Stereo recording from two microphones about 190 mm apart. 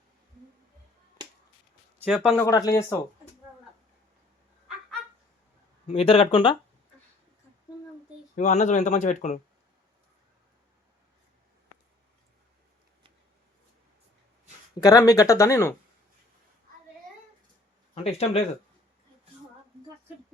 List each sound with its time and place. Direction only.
2.0 s speech: centre (ahead or behind)
2.5 s speech: 20° left (ahead or behind)
5.9 s speech: 30° left (ahead or behind)
8.4 s speech: 40° left (ahead or behind)
14.8 s speech: 20° left (ahead or behind)
17.9 s speech: 35° left (ahead or behind)